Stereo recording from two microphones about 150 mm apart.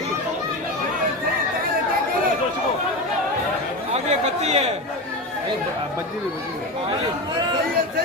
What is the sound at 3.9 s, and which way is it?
Speech, 45° right (ahead or behind).